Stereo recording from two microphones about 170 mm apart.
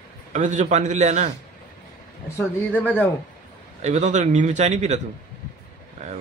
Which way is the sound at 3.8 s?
40° right (ahead or behind).